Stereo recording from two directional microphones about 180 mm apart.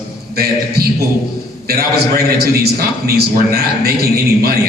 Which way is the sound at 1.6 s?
60° right (ahead or behind).